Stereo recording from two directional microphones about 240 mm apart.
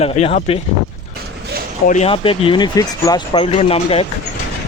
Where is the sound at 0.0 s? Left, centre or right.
Left.